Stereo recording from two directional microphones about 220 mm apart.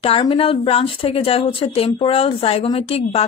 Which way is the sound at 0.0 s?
25° left (ahead or behind).